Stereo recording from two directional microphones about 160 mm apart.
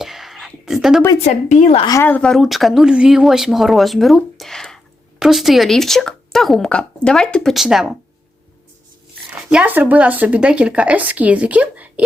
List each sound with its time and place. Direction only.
0.0 s a sound: centre (ahead or behind)
1.1 s a woman's voice: 40° left (ahead or behind)
1.9 s speech: 15° left (ahead or behind); by 7.9 s centre (ahead or behind)
9.3 s speech: 5° right (ahead or behind)